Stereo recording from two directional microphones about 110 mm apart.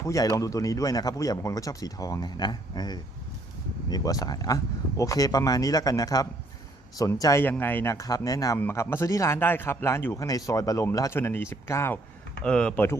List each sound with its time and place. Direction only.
0.0 s a man's voice: 30° left (ahead or behind)
7.9 s a man's voice: 30° left (ahead or behind)
8.5 s speech: 20° left (ahead or behind)
12.4 s speech: 10° left (ahead or behind)